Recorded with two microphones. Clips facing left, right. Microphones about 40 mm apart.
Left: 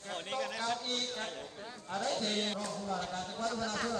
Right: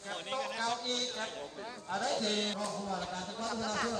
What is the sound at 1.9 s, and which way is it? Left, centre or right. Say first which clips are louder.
Speech: right 1 dB; right.